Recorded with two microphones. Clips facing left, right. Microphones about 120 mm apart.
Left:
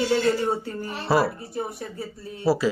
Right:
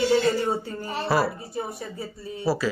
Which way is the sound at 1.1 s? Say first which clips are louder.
Left 2 dB; 25° left (ahead or behind).